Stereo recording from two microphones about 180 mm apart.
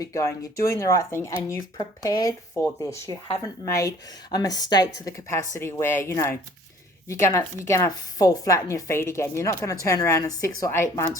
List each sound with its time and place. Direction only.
0.0 s a woman's voice: 15° left (ahead or behind)